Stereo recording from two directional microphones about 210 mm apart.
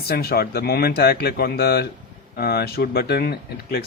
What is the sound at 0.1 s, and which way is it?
Speech, 45° left (ahead or behind).